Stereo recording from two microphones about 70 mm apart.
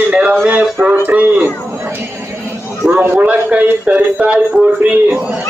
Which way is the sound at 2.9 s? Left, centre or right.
Right.